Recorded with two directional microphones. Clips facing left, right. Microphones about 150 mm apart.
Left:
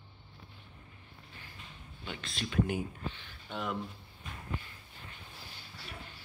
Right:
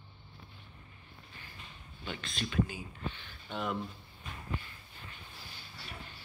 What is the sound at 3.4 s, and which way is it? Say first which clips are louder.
Speech: right 1 dB; 5° left (ahead or behind).